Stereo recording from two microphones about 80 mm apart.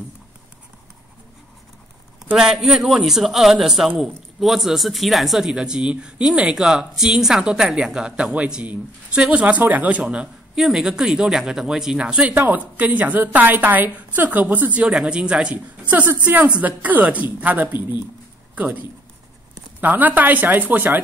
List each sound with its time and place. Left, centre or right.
2.3 s a man's voice: centre
14.9 s a woman's voice: centre